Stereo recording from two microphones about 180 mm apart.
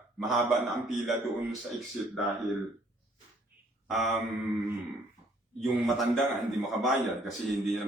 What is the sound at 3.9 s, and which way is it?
Speech, centre (ahead or behind).